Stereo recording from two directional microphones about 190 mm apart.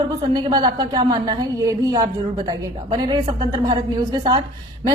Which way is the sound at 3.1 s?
25° right (ahead or behind).